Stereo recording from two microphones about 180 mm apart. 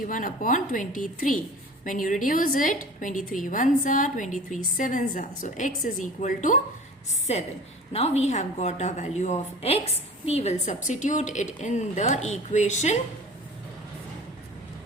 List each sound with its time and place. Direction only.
0.0 s a woman's voice: 50° left (ahead or behind)